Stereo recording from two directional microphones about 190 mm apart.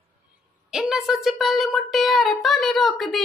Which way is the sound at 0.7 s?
5° right (ahead or behind).